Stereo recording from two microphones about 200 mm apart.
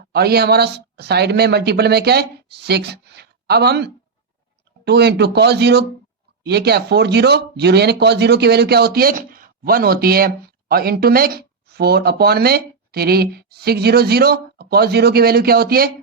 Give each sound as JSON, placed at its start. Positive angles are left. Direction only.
{"t": 0.1, "sound": "speech", "side_deg": -50}